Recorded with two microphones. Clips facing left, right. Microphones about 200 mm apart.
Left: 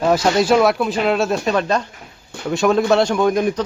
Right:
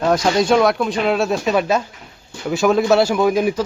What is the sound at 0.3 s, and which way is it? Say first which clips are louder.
A man's voice: even; 5° left (ahead or behind).